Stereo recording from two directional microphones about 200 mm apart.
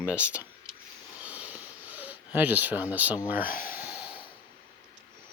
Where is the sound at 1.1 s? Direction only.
5° right (ahead or behind).